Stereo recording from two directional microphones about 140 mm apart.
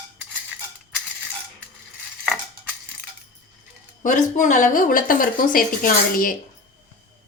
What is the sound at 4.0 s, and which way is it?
Speech, 65° left (ahead or behind).